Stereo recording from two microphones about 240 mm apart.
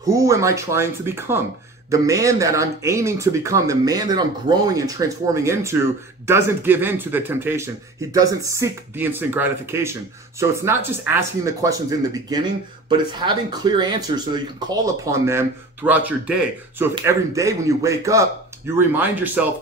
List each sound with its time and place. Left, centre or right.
0.0 s speech: centre